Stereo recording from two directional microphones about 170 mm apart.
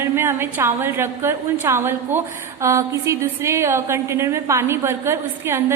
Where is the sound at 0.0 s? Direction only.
15° right (ahead or behind).